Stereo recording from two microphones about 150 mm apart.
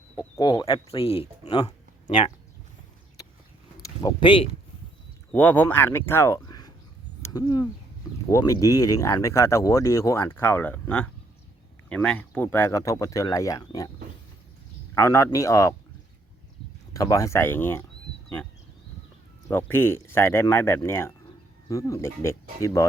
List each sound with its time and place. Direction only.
0.2 s speech: 25° left (ahead or behind)
0.9 s speech: 40° left (ahead or behind)
3.8 s speech: 30° left (ahead or behind)
5.3 s speech: 10° left (ahead or behind)
14.9 s speech: 20° left (ahead or behind)
16.9 s speech: 20° left (ahead or behind)
19.5 s speech: 15° left (ahead or behind)